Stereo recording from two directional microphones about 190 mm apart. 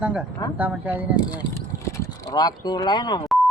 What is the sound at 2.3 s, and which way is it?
Speech, 20° left (ahead or behind).